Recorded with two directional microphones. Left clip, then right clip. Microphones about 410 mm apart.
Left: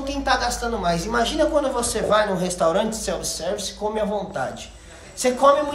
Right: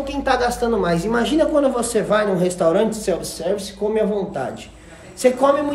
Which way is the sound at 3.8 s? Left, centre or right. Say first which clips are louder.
Right 5 dB; centre.